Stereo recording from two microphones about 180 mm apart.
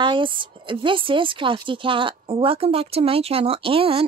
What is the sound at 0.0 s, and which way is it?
A woman's voice, 25° right (ahead or behind).